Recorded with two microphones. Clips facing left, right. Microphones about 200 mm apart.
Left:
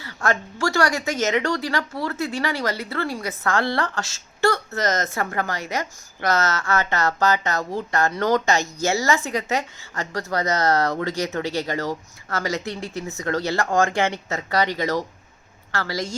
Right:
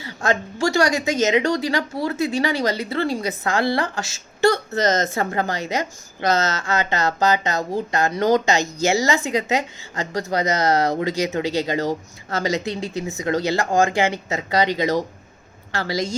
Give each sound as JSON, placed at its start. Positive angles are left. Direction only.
{"t": 0.0, "sound": "speech", "side_deg": -20}